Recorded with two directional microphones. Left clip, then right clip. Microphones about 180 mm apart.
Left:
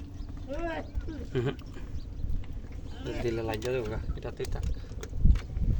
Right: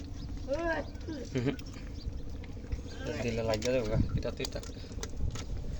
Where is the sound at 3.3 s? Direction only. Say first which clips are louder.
Left 1 dB; 70° left (ahead or behind).